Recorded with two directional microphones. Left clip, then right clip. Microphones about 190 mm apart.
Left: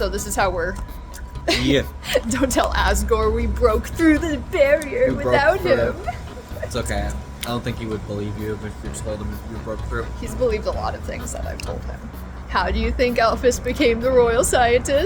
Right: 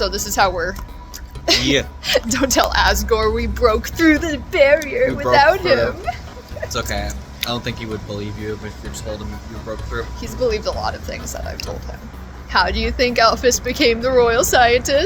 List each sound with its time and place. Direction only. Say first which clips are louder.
0.0 s speech: right 4 dB; centre (ahead or behind)
4.5 s speech: right 4 dB; 10° right (ahead or behind)
6.7 s speech: right 2 dB; 25° left (ahead or behind)
9.1 s speech: even; centre (ahead or behind)
12.5 s speech: right 5 dB; centre (ahead or behind)